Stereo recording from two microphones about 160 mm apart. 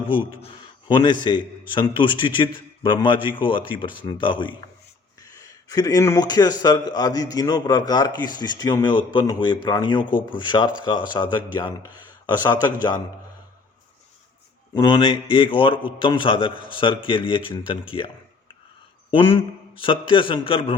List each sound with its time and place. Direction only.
0.1 s a man's voice: 30° left (ahead or behind)
14.7 s a man's voice: 30° left (ahead or behind)
19.1 s a man's voice: 30° left (ahead or behind)